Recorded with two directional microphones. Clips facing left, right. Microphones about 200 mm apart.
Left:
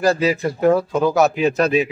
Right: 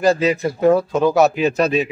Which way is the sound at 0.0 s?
Centre (ahead or behind).